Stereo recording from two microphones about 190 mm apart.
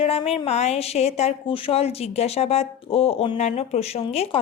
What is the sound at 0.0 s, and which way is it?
A woman's voice, 30° left (ahead or behind).